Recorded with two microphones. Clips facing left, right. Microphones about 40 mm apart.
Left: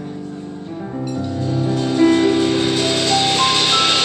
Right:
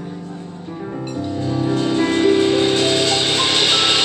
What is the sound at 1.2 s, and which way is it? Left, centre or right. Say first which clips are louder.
Music: right 2 dB; centre.